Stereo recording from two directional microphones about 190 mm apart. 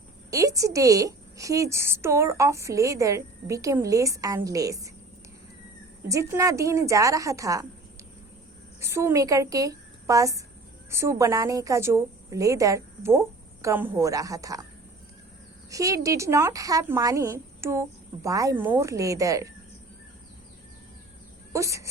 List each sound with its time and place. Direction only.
0.3 s a woman's voice: 15° right (ahead or behind)
6.1 s a woman's voice: 15° right (ahead or behind)
8.8 s a woman's voice: 15° right (ahead or behind)
15.7 s a woman's voice: 15° right (ahead or behind)
21.5 s speech: 15° right (ahead or behind)